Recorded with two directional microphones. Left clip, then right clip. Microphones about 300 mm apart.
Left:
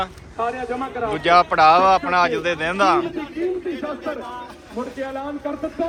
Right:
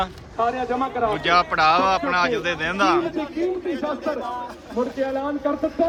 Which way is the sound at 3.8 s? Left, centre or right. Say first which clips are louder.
Right 2 dB; right.